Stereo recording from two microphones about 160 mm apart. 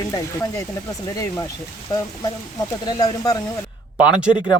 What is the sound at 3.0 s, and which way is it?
Speech, 20° left (ahead or behind).